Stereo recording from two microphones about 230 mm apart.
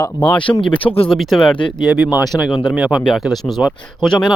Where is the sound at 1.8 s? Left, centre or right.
Centre.